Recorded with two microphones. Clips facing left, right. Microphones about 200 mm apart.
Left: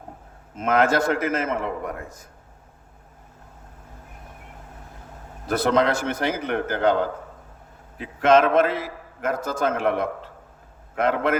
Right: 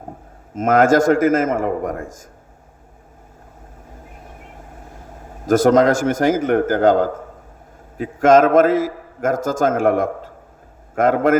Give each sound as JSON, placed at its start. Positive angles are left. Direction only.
{"t": 0.5, "sound": "a man's voice", "side_deg": -45}
{"t": 5.5, "sound": "a man's voice", "side_deg": -45}